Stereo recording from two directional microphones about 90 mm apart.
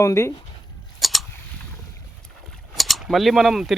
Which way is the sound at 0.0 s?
35° left (ahead or behind).